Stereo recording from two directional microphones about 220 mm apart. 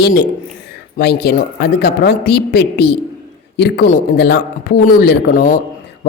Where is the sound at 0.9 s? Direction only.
45° left (ahead or behind).